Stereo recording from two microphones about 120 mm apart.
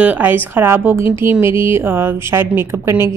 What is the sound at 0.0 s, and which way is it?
Speech, 15° right (ahead or behind).